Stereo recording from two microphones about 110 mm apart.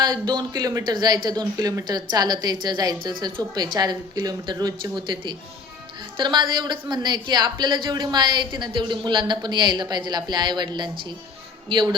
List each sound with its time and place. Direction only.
0.0 s a woman's voice: 40° right (ahead or behind)